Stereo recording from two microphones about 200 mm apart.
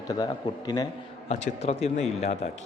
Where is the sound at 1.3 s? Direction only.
30° left (ahead or behind).